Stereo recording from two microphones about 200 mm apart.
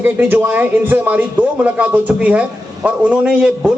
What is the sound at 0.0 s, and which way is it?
A man's voice, 10° right (ahead or behind).